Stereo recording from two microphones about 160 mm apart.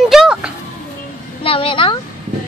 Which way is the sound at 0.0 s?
5° right (ahead or behind).